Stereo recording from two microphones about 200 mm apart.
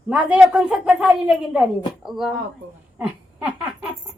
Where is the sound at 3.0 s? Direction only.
5° right (ahead or behind).